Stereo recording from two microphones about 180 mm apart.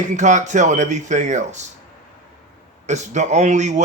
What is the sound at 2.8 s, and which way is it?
Speech, 40° right (ahead or behind).